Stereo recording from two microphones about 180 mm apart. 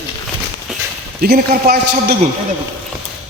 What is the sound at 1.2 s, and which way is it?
Speech, 55° right (ahead or behind).